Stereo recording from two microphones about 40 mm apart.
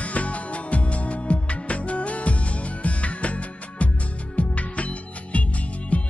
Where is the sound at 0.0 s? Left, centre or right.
Left.